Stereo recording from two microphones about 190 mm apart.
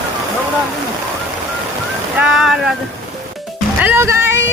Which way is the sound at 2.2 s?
Centre (ahead or behind).